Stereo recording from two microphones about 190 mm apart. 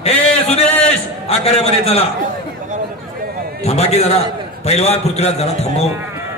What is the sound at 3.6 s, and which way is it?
A man's voice, 35° left (ahead or behind).